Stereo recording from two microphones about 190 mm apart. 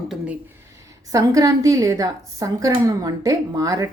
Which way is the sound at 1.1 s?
15° right (ahead or behind).